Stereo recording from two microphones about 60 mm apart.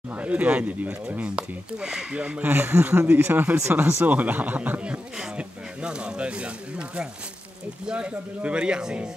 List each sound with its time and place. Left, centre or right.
0.1 s speech: right
2.5 s speech: right; by 9.1 s centre